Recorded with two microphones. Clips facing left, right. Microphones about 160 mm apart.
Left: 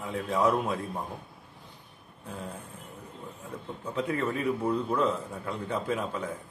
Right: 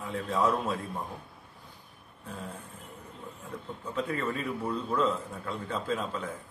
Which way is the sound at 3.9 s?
20° left (ahead or behind).